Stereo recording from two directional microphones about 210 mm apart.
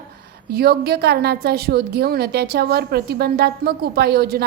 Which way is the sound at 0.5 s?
50° right (ahead or behind).